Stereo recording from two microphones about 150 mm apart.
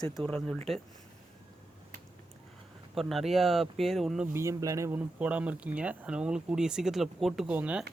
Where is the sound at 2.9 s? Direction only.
Centre (ahead or behind).